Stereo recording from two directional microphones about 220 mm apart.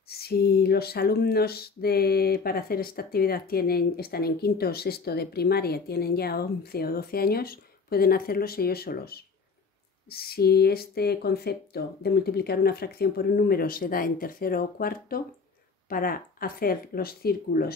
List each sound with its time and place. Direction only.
0.2 s speech: 45° left (ahead or behind)